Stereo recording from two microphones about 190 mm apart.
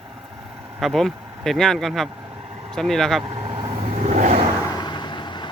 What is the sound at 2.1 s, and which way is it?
Vehicle, 25° right (ahead or behind).